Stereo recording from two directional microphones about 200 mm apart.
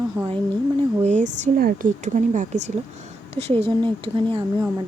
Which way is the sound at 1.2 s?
35° right (ahead or behind).